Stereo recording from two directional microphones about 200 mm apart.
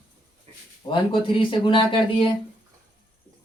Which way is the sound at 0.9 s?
25° left (ahead or behind).